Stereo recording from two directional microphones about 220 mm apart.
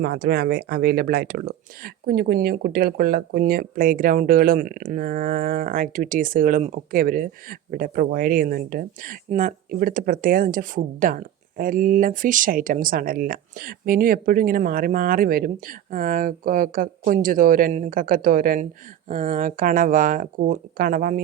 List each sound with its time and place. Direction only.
0.0 s speech: 45° right (ahead or behind)